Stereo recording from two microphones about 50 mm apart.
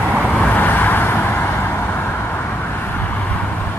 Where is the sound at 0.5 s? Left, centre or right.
Left.